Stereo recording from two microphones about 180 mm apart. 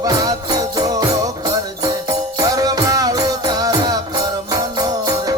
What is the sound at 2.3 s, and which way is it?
Music, 20° right (ahead or behind).